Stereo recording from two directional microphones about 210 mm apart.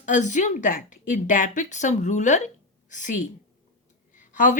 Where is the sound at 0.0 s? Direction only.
35° left (ahead or behind).